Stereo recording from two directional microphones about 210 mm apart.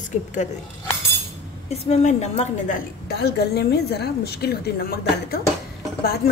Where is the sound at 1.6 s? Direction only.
30° left (ahead or behind).